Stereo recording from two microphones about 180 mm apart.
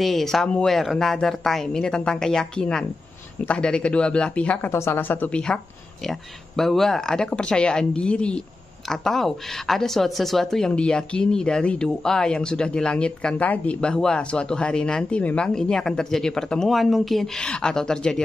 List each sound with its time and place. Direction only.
0.0 s speech: centre (ahead or behind)